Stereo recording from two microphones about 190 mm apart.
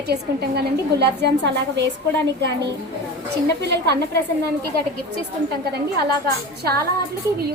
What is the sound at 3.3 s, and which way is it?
Speech, 60° right (ahead or behind).